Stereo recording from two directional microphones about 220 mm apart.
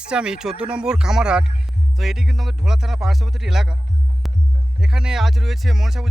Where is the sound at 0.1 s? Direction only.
5° right (ahead or behind).